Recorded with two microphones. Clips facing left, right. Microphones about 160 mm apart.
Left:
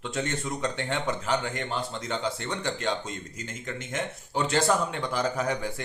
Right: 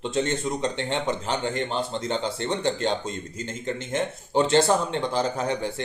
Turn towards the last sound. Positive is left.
turn(degrees=-25)  # may be behind; listen again after turning